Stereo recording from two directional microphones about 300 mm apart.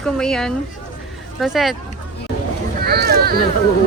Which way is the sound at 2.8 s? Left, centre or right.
Right.